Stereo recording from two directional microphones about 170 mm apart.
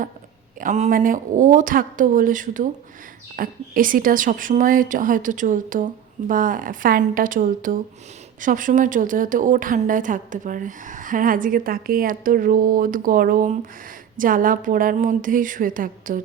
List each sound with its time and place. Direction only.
0.6 s speech: 45° right (ahead or behind)